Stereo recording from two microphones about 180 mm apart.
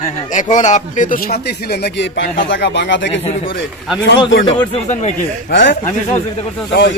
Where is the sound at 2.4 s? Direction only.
85° left.